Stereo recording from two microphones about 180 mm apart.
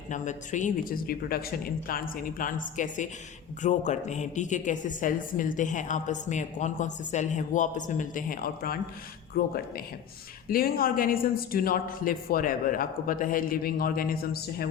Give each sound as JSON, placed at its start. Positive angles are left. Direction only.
{"t": 0.1, "sound": "speech", "side_deg": 45}